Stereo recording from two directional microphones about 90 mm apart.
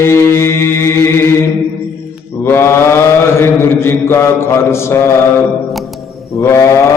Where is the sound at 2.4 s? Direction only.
25° left (ahead or behind).